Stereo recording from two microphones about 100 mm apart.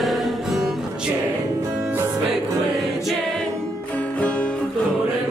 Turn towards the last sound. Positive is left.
turn(degrees=10)  # may be behind; listen again after turning